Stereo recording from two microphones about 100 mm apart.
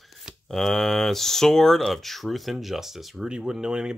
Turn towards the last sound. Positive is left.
turn(degrees=-5)  # may be behind; listen again after turning